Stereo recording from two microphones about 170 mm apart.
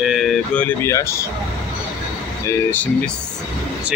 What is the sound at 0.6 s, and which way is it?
Speech, 15° left (ahead or behind).